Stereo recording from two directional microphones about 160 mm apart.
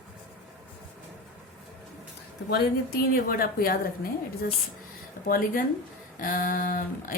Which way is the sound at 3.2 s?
65° left (ahead or behind).